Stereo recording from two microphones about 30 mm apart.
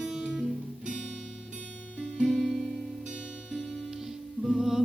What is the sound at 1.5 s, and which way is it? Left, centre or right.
Music, right.